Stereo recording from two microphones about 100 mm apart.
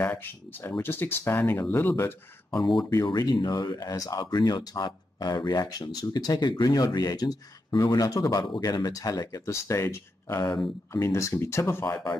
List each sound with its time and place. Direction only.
0.0 s speech: 20° left (ahead or behind)
3.1 s speech: 50° left (ahead or behind); by 12.0 s 25° left (ahead or behind)